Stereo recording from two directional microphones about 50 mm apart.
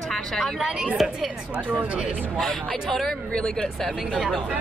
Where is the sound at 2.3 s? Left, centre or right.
Centre.